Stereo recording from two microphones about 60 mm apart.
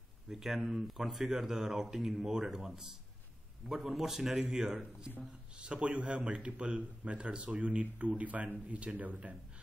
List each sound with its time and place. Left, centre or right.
0.3 s a man's voice: centre; by 9.3 s right